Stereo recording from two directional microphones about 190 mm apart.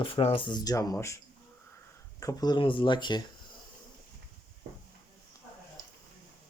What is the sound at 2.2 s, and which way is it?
Speech, 20° left (ahead or behind).